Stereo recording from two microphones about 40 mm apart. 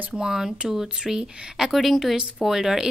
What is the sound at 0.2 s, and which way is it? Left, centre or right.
A woman's voice, centre.